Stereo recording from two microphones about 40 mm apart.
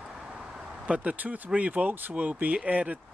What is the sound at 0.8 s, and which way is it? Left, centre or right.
Speech, right.